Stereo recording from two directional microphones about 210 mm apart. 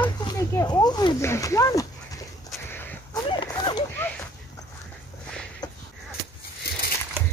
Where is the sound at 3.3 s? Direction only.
20° left (ahead or behind).